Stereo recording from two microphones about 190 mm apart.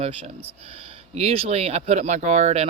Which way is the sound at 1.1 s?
30° right (ahead or behind).